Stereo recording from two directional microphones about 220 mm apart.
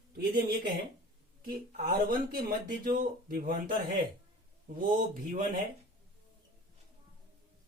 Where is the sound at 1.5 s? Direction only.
40° right (ahead or behind).